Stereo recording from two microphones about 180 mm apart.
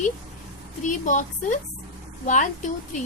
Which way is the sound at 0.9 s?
45° left (ahead or behind).